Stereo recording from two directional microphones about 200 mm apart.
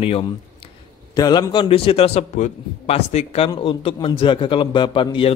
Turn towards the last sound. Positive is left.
turn(degrees=25)  # may be behind; listen again after turning